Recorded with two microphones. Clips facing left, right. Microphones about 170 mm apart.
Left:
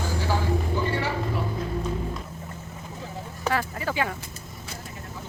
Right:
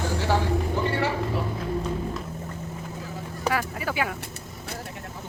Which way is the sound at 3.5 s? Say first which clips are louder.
Even; 10° right (ahead or behind).